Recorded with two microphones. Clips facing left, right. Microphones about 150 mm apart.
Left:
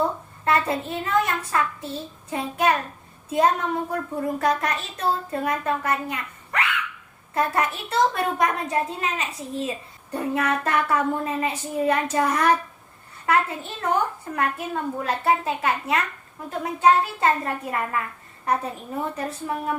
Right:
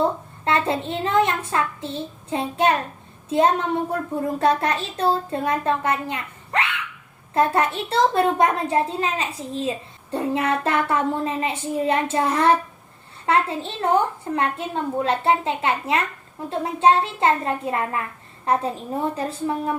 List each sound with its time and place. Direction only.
0.4 s a woman's voice: 25° right (ahead or behind)